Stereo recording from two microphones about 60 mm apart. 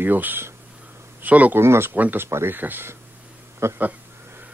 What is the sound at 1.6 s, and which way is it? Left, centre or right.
Speech, right.